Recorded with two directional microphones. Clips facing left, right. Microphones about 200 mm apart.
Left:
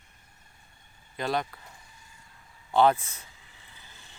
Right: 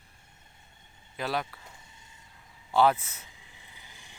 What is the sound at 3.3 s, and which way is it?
Vehicle, 15° right (ahead or behind).